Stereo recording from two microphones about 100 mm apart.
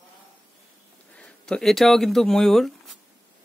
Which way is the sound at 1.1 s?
5° left (ahead or behind).